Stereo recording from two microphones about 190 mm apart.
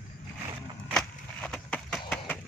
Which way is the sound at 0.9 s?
5° left (ahead or behind).